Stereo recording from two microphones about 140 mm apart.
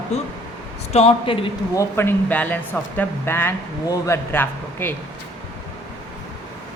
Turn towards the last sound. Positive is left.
turn(degrees=15)  # may be behind; listen again after turning